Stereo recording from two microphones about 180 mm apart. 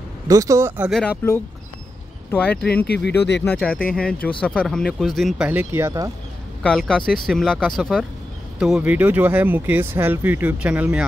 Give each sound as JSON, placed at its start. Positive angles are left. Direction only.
{"t": 0.3, "sound": "speech", "side_deg": -20}
{"t": 1.1, "sound": "speech", "side_deg": 15}
{"t": 2.9, "sound": "speech", "side_deg": 65}
{"t": 3.9, "sound": "speech", "side_deg": 5}
{"t": 6.6, "sound": "speech", "side_deg": 5}